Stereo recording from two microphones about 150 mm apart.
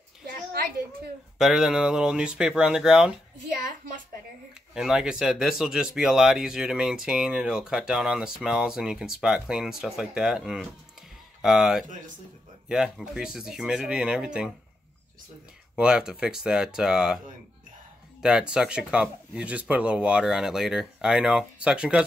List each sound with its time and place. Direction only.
0.3 s a sound: 90° right
1.4 s speech: 5° right (ahead or behind)
4.7 s speech: 5° right (ahead or behind)
15.7 s speech: 5° right (ahead or behind)
18.2 s speech: 5° right (ahead or behind)